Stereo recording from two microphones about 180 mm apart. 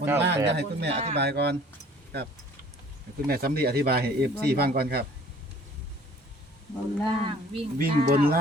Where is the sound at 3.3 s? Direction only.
60° right (ahead or behind).